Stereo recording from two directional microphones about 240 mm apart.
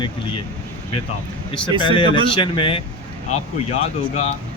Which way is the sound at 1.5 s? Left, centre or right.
Centre.